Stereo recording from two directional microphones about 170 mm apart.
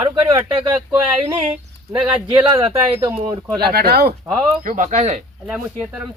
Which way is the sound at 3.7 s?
65° right (ahead or behind).